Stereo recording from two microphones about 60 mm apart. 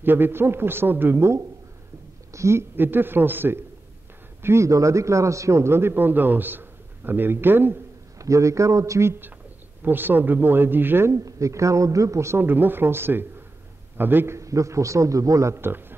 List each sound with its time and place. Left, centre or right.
0.0 s a man's voice: right
2.3 s a woman's voice: right
2.7 s a man's voice: right
4.4 s speech: right
4.6 s a man's voice: right
8.2 s a man's voice: right
9.8 s a man's voice: right
11.1 s a man's voice: right
12.4 s a man's voice: right
14.3 s a man's voice: right
15.5 s a man's voice: right